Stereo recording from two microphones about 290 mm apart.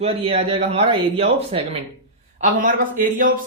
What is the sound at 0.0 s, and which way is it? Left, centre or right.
Speech, right.